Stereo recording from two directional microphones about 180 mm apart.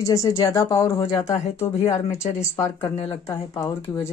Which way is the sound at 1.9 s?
35° left (ahead or behind).